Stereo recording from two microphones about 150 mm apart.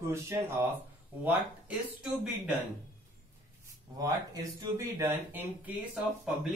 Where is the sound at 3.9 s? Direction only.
25° right (ahead or behind).